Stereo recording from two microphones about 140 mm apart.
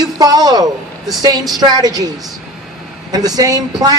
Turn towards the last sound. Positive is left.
turn(degrees=-30)  # may be behind; listen again after turning